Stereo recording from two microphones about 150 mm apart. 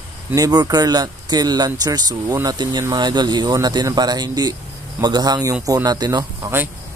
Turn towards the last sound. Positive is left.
turn(degrees=-25)  # may be behind; listen again after turning